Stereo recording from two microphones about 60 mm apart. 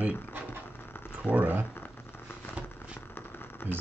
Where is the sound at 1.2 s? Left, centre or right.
Right.